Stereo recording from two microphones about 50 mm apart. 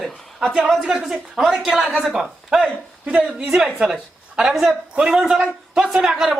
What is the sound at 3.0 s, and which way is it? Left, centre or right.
Speech, right.